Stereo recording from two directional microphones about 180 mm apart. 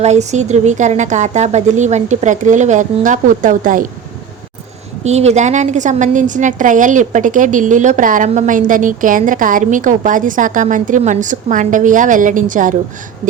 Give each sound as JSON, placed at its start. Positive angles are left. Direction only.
{"t": 0.0, "sound": "a woman's voice", "side_deg": -40}
{"t": 5.0, "sound": "a woman's voice", "side_deg": -40}